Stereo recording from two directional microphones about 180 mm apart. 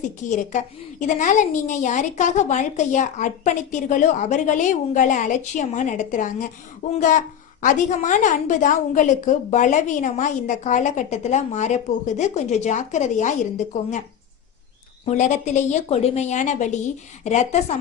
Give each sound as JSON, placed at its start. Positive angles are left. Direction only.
{"t": 0.3, "sound": "a woman's voice", "side_deg": 45}
{"t": 15.0, "sound": "a woman's voice", "side_deg": 40}